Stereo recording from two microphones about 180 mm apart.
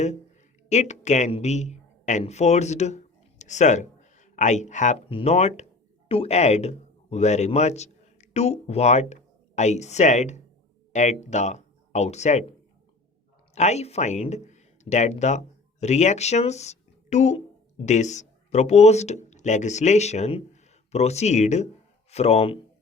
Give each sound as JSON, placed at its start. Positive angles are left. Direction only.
{"t": 0.7, "sound": "speech", "side_deg": 40}
{"t": 13.5, "sound": "speech", "side_deg": 40}